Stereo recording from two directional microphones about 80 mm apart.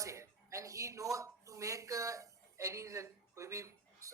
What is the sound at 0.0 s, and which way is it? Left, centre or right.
A woman's voice, right.